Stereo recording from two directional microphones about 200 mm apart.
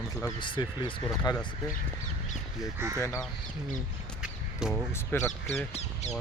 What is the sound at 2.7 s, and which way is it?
Speech, 10° right (ahead or behind).